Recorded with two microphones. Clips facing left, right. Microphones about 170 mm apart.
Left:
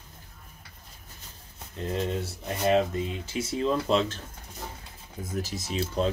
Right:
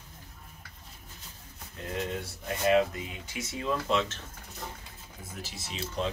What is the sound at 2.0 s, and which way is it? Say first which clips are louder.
Speech: left 3 dB; 30° left (ahead or behind).